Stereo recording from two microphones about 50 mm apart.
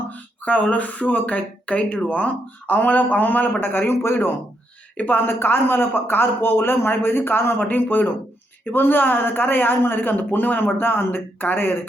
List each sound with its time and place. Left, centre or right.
0.1 s speech: left